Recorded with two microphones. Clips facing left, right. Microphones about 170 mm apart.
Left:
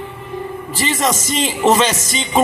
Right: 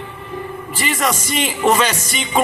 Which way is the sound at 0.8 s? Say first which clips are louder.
Left 2 dB; 25° left (ahead or behind).